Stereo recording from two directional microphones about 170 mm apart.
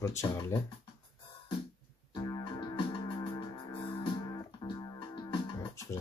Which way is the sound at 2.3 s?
25° left (ahead or behind).